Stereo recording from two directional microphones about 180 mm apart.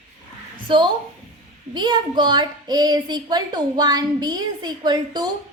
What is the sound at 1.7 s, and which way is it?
A woman's voice, 25° right (ahead or behind).